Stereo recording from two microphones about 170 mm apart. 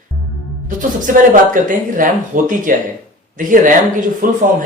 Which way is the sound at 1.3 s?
50° right (ahead or behind).